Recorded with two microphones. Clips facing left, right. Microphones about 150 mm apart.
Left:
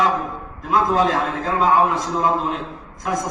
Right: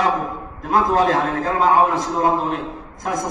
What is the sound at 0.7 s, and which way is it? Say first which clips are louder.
A man's voice: right 1 dB; 50° right (ahead or behind).